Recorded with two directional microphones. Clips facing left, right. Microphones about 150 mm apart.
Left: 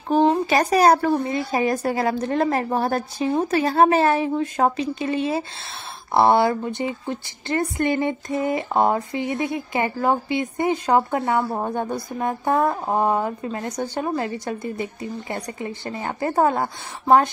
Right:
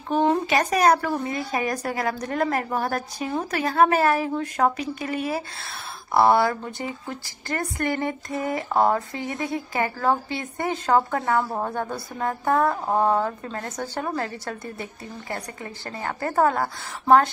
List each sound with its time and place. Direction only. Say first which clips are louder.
0.5 s speech: left 3 dB; 35° left (ahead or behind)